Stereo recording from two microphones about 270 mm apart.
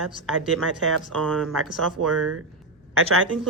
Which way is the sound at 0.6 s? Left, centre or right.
Right.